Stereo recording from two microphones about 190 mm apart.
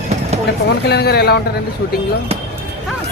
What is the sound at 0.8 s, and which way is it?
Speech, 60° left (ahead or behind).